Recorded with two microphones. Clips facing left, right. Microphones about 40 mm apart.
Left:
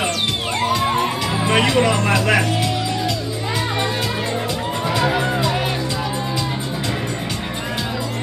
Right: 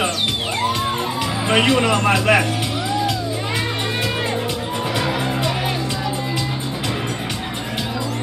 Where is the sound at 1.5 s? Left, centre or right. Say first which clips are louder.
Right 1 dB; right.